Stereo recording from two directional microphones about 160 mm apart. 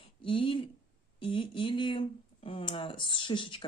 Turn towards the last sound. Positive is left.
turn(degrees=30)  # may be behind; listen again after turning